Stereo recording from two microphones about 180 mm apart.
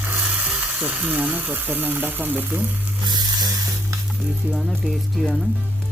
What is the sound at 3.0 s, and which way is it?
Sizzle, 25° right (ahead or behind).